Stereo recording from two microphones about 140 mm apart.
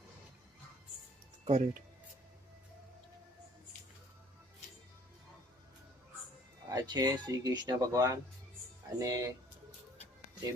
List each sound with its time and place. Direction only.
1.5 s speech: 50° right (ahead or behind)
6.7 s speech: 25° right (ahead or behind)